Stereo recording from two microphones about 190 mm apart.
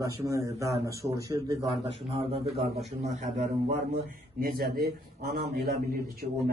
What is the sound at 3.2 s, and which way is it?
Speech, 35° right (ahead or behind).